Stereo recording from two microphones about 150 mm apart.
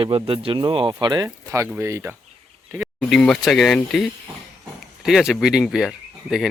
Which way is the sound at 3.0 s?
5° left (ahead or behind).